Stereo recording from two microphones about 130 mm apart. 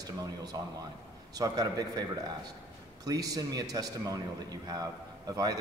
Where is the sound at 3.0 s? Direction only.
30° right (ahead or behind).